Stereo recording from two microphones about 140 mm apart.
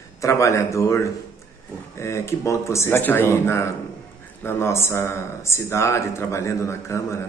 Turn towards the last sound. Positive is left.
turn(degrees=20)  # may be behind; listen again after turning